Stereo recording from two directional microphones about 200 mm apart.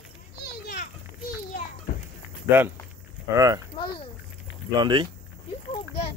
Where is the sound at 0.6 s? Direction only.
45° left (ahead or behind).